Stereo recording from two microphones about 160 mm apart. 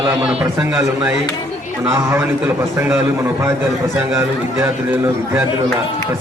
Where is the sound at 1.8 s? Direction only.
15° right (ahead or behind).